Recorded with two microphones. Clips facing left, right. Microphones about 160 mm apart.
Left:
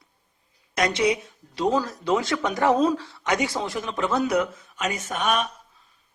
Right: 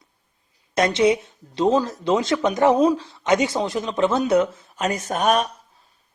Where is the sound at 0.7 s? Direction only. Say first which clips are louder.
Right 5 dB; 25° right (ahead or behind).